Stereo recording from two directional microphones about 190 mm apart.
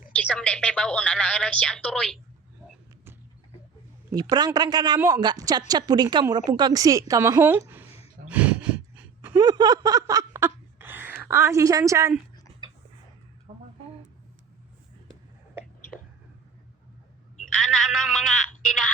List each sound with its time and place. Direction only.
0.1 s speech: 5° left (ahead or behind)
4.1 s a woman's voice: 20° right (ahead or behind)
8.3 s gasp: 5° right (ahead or behind)
9.4 s a sound: 20° right (ahead or behind)
17.4 s telephone: centre (ahead or behind)